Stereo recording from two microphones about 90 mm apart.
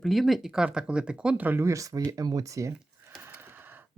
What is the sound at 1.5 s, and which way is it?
Speech, 30° right (ahead or behind).